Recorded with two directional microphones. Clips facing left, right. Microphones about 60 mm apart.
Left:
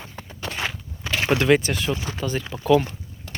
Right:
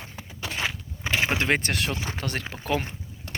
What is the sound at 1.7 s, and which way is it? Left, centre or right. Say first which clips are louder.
Speech: left 3 dB; right.